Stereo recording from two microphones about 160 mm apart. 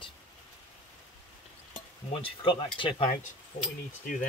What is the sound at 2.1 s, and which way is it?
Speech, 35° left (ahead or behind).